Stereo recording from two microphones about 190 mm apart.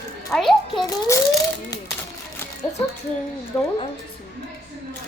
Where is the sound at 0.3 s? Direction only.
Centre (ahead or behind).